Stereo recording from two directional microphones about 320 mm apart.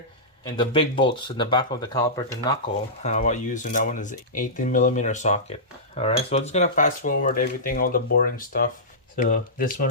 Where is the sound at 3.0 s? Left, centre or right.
Left.